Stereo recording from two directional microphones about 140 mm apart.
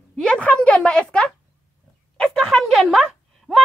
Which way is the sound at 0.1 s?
5° left (ahead or behind).